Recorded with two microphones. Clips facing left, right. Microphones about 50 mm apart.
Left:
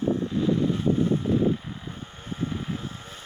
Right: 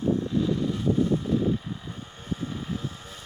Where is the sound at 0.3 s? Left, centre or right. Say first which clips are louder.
Left 2 dB; left.